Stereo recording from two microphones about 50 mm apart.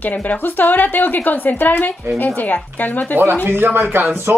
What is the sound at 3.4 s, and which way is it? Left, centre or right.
Speech, right.